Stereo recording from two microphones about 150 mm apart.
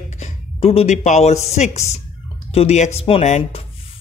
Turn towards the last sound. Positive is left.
turn(degrees=45)  # may be behind; listen again after turning